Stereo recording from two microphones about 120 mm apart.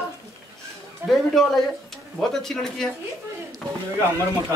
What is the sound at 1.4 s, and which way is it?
Speech, centre (ahead or behind).